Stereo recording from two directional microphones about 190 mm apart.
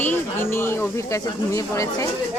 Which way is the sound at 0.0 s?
10° left (ahead or behind).